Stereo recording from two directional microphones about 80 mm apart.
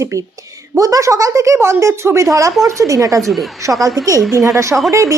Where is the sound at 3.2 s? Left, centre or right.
Centre.